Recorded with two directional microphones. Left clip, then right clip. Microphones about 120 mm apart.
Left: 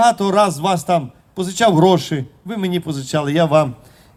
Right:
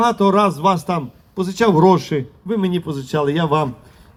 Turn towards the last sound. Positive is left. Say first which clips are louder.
# left 3 dB
turn(degrees=25)  # may be behind; listen again after turning